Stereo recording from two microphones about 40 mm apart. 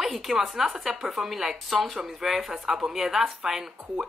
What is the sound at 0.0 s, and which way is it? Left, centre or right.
A woman's voice, centre.